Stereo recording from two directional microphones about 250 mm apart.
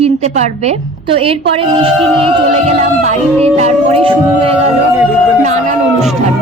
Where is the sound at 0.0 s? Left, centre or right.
Right.